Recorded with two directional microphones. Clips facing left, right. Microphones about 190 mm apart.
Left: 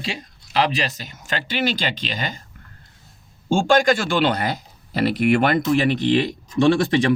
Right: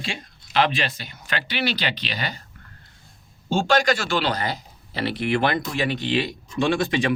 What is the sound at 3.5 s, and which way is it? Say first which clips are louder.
Speech: left 3 dB; 50° left (ahead or behind).